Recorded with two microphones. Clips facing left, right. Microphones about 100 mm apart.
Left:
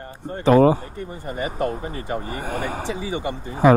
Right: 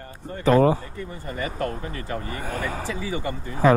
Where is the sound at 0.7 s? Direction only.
25° left (ahead or behind).